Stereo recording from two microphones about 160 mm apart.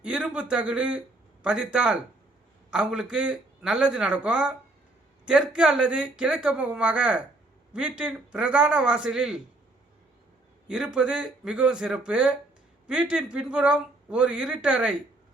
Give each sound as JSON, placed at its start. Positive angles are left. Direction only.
{"t": 0.0, "sound": "a man's voice", "side_deg": -5}
{"t": 10.7, "sound": "a man's voice", "side_deg": -5}